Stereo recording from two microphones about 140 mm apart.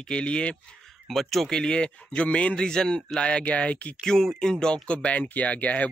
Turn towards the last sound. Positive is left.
turn(degrees=10)  # may be behind; listen again after turning